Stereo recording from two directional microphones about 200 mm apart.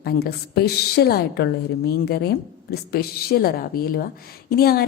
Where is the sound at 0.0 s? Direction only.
50° left (ahead or behind).